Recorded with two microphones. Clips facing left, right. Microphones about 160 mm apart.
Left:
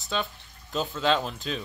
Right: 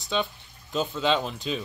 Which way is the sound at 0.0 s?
Centre (ahead or behind).